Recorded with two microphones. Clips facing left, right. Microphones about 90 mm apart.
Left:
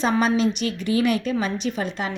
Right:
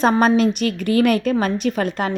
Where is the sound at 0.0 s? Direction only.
50° right (ahead or behind).